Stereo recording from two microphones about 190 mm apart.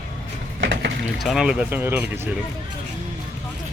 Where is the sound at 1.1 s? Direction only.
Centre (ahead or behind).